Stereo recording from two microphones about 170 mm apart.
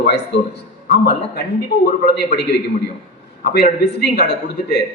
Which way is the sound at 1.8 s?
65° left (ahead or behind).